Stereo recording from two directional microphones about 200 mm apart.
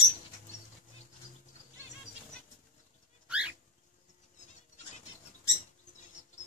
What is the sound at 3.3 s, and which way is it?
Bird, 5° right (ahead or behind).